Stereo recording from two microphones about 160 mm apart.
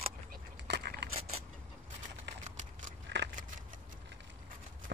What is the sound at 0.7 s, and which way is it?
Crushing, 90° right.